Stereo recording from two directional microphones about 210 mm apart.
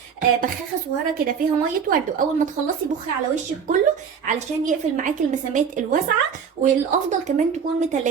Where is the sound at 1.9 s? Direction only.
40° right (ahead or behind).